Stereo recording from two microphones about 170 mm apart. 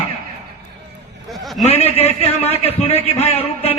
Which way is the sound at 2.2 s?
35° left (ahead or behind).